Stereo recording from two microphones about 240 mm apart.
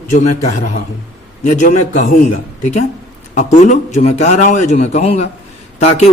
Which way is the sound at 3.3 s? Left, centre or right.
Left.